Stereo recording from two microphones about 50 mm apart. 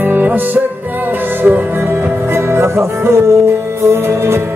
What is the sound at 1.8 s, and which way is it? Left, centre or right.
Music, right.